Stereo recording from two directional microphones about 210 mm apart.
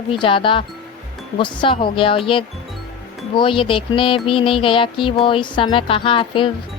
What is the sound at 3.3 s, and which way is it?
Speech, 25° left (ahead or behind).